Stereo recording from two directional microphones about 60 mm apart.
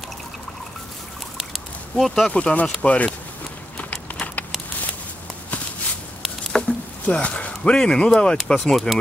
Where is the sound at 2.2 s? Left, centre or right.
Centre.